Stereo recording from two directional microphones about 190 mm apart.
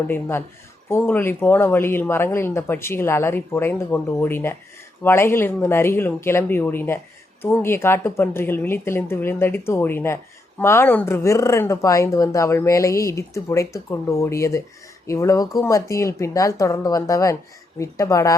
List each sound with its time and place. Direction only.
0.1 s speech: 15° left (ahead or behind)